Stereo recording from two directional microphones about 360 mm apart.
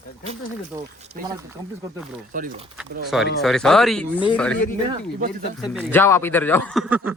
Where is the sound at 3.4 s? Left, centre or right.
Centre.